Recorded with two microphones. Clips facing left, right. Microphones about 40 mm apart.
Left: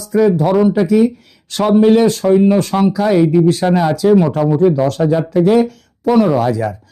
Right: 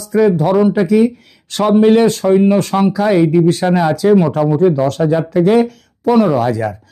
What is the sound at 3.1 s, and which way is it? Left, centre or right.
A man's voice, right.